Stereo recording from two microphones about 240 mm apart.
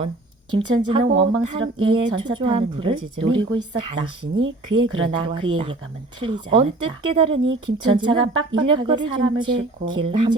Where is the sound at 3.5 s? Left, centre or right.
Right.